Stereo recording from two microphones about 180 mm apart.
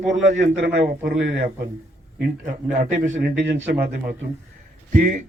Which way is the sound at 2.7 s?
50° right (ahead or behind).